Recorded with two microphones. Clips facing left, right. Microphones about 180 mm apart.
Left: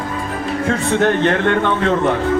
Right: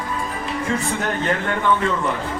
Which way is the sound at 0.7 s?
70° left (ahead or behind).